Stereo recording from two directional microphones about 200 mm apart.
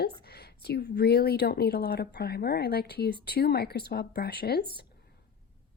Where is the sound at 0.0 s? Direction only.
55° left (ahead or behind).